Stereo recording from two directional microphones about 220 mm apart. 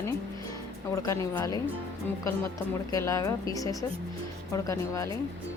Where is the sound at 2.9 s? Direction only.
15° left (ahead or behind).